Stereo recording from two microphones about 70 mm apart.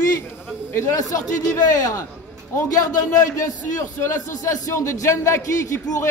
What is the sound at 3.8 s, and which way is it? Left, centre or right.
Speech, left.